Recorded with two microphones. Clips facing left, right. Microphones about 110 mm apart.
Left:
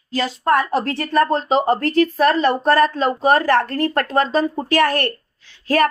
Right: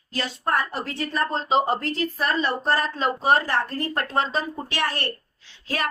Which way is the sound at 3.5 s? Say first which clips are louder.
Left 8 dB; 65° left (ahead or behind).